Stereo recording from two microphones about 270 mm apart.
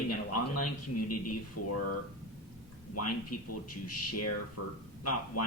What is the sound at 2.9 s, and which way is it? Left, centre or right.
Speech, left.